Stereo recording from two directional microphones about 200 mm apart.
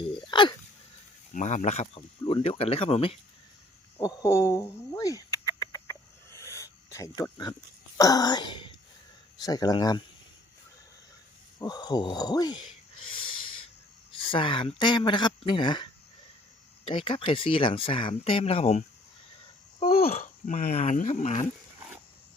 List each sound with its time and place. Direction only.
0.1 s hiccup: 25° left (ahead or behind)
1.3 s speech: 40° left (ahead or behind)
3.9 s fowl: 15° left (ahead or behind)
7.9 s speech: 20° left (ahead or behind)
11.6 s speech: 20° left (ahead or behind)
13.1 s owl: 25° left (ahead or behind)
14.1 s speech: 25° left (ahead or behind)
20.1 s speech: 40° left (ahead or behind)